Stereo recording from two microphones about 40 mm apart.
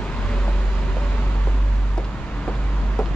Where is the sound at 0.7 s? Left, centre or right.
Left.